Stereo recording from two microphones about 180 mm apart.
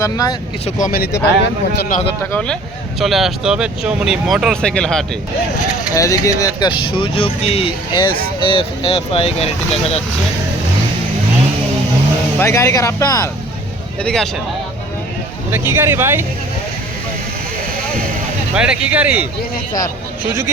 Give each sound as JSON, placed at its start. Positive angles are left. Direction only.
{"t": 0.0, "sound": "speech", "side_deg": 20}
{"t": 0.6, "sound": "speech", "side_deg": 50}
{"t": 2.3, "sound": "speech", "side_deg": 5}
{"t": 5.9, "sound": "speech", "side_deg": 20}
{"t": 12.4, "sound": "speech", "side_deg": 15}
{"t": 14.0, "sound": "speech", "side_deg": 5}
{"t": 15.4, "sound": "speech", "side_deg": -10}
{"t": 18.5, "sound": "speech", "side_deg": -5}